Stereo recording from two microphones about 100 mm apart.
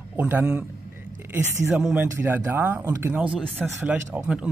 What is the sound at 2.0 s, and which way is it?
Speech, 25° right (ahead or behind).